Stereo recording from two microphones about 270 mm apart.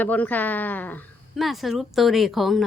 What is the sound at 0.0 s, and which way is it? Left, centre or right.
A woman's voice, centre.